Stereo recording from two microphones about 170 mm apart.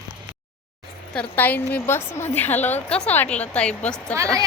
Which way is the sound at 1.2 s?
10° left (ahead or behind).